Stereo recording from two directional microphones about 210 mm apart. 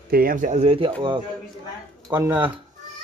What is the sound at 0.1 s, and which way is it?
Speech, 45° right (ahead or behind).